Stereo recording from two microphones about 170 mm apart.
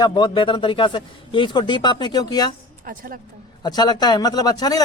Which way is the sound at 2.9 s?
55° right (ahead or behind).